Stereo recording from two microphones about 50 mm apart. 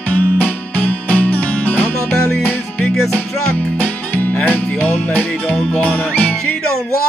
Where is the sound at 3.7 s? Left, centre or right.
Left.